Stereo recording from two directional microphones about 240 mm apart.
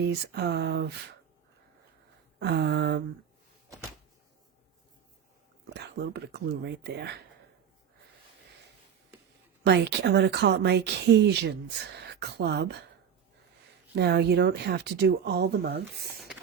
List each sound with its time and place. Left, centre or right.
0.0 s speech: right
2.4 s speech: right
5.7 s speech: right
9.6 s speech: right
13.9 s speech: right